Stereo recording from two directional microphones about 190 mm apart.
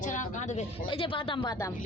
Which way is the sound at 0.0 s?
40° left (ahead or behind).